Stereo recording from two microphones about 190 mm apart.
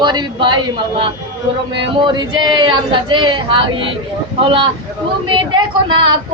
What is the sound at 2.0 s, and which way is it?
Speech, 25° right (ahead or behind).